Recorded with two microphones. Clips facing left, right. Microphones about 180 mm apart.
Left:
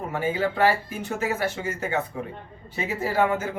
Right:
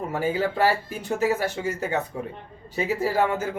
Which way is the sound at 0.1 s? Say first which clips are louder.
Even; 40° right (ahead or behind).